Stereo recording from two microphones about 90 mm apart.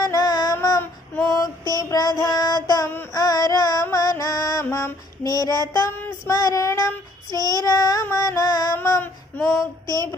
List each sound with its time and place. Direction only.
0.0 s child singing: 45° left (ahead or behind)
1.2 s female singing: 40° left (ahead or behind)
1.7 s child singing: 40° left (ahead or behind)
3.1 s a sound: 45° left (ahead or behind)
3.9 s music: 40° left (ahead or behind)
5.2 s child singing: 45° left (ahead or behind)
8.1 s music: 40° left (ahead or behind)
8.7 s child singing: 30° left (ahead or behind)